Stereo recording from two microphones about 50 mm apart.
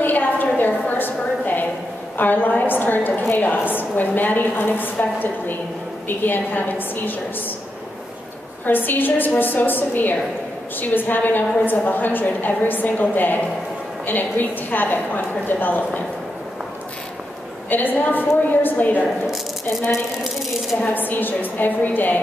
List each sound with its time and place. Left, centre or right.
0.0 s a sound: left
2.1 s a woman's voice: left
8.6 s a woman's voice: left
17.6 s a woman's voice: left
20.9 s a woman's voice: left